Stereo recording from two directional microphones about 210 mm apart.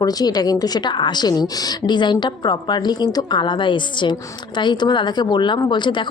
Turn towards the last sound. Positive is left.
turn(degrees=20)  # may be behind; listen again after turning